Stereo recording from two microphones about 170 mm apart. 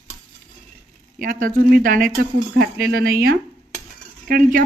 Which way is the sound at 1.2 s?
55° right (ahead or behind).